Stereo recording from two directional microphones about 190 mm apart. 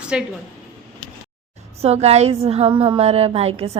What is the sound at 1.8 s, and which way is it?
A woman's voice, 35° right (ahead or behind).